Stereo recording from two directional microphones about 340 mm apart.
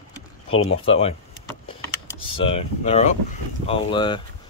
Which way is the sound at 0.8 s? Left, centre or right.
Centre.